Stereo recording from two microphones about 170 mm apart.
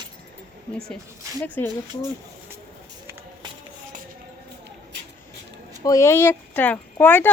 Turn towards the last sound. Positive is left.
turn(degrees=10)  # may be behind; listen again after turning